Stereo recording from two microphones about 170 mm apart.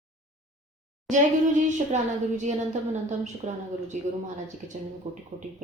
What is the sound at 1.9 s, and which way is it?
A woman's voice, 45° right (ahead or behind).